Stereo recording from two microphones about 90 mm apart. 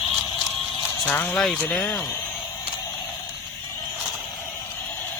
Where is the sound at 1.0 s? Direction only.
15° left (ahead or behind).